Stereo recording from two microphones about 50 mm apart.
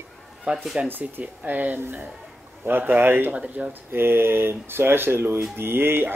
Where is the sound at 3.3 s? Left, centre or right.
Right.